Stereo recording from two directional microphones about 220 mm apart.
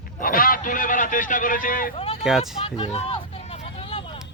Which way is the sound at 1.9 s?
25° left (ahead or behind).